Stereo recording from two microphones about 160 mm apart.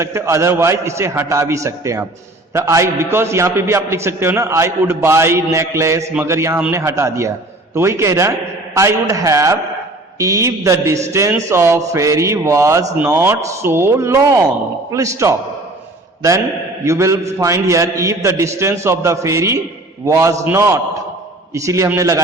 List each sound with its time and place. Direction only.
0.0 s a man's voice: 15° right (ahead or behind)
16.8 s a man's voice: 15° right (ahead or behind)